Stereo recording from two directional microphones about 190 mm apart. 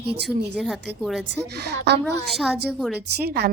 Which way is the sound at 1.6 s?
60° right (ahead or behind).